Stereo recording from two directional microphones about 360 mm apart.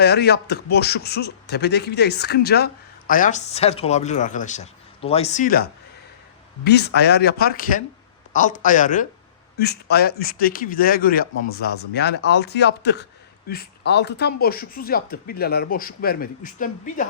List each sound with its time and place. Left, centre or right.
0.0 s speech: left
6.7 s speech: left